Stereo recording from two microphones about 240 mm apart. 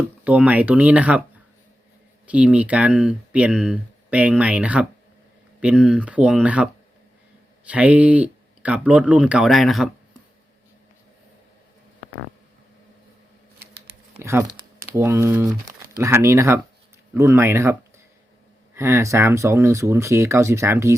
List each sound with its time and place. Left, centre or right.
0.3 s speech: centre
2.2 s speech: centre
14.2 s a sound: centre
14.9 s speech: centre